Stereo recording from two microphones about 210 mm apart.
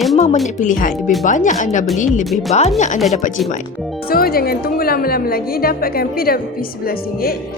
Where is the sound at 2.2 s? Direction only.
Centre (ahead or behind).